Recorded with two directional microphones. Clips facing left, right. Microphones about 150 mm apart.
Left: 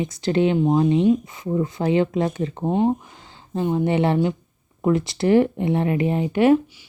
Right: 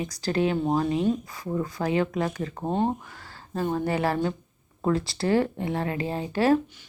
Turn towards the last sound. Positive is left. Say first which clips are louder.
# left 6 dB
turn(degrees=20)  # may be behind; listen again after turning